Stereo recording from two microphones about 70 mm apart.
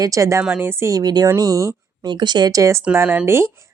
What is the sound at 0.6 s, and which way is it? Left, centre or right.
Speech, right.